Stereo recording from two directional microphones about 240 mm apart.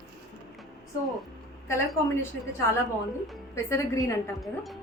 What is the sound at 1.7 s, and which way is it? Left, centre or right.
A woman's voice, centre.